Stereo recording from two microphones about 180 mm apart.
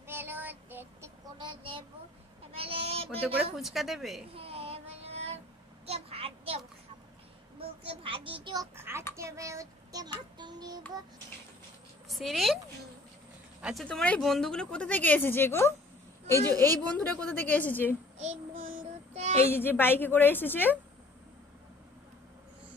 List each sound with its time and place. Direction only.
0.0 s child singing: 10° right (ahead or behind)
1.4 s a sound: 30° right (ahead or behind)
3.5 s a woman's voice: centre (ahead or behind)
4.3 s child singing: 30° right (ahead or behind)
7.8 s a sound: 30° right (ahead or behind)
8.7 s a child's voice: 15° right (ahead or behind)
12.1 s a woman's voice: centre (ahead or behind)
13.6 s speech: 5° right (ahead or behind)
13.8 s a woman's voice: 5° left (ahead or behind)
18.2 s child singing: 45° right (ahead or behind)
19.5 s a woman's voice: 10° left (ahead or behind)